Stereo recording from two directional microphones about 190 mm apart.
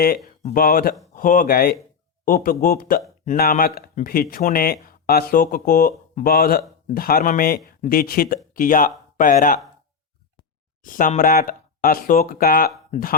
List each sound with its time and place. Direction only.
0.5 s speech: 50° left (ahead or behind)
10.8 s speech: 45° left (ahead or behind)